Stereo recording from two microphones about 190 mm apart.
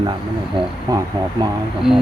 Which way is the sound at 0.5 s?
20° right (ahead or behind).